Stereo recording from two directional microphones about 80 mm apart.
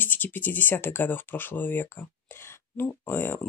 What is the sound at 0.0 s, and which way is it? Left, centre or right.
Speech, left.